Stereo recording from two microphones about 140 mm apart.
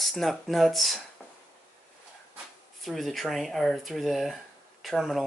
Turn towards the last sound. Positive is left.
turn(degrees=0)  # may be behind; listen again after turning